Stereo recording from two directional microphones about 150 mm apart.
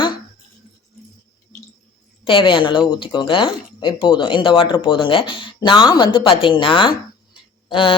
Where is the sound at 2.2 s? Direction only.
35° left (ahead or behind).